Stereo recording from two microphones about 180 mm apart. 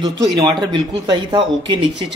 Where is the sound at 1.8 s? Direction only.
75° right (ahead or behind).